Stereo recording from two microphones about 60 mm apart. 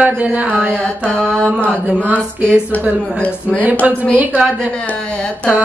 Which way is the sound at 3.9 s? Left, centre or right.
Right.